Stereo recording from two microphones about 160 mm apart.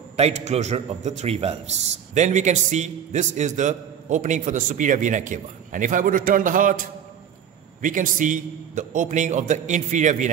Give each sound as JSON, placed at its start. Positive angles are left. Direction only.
{"t": 0.1, "sound": "a man's voice", "side_deg": -45}